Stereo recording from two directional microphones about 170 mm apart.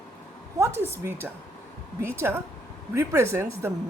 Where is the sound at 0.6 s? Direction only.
15° right (ahead or behind).